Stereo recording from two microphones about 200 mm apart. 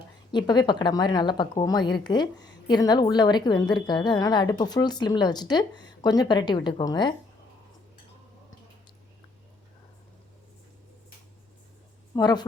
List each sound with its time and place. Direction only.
0.3 s a woman's voice: 20° left (ahead or behind)
12.1 s a woman's voice: 20° left (ahead or behind)